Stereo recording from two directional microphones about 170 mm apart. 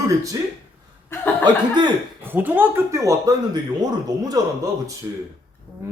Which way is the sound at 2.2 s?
10° right (ahead or behind).